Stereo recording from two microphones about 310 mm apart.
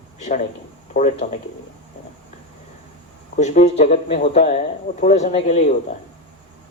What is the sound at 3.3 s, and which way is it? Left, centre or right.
Speech, left.